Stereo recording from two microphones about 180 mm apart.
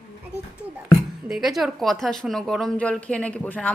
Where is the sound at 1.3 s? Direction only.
Centre (ahead or behind).